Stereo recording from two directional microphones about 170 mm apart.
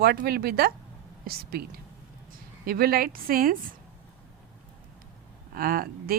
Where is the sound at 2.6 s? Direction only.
65° right (ahead or behind).